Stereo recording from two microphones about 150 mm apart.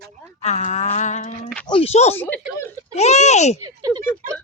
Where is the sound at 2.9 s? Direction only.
45° left (ahead or behind).